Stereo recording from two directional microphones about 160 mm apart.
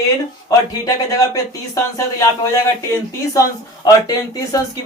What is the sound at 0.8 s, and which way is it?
Speech, 20° left (ahead or behind).